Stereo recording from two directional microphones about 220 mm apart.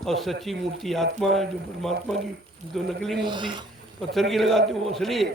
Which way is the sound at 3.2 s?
20° right (ahead or behind).